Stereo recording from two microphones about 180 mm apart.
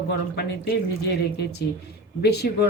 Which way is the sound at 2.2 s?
65° left (ahead or behind).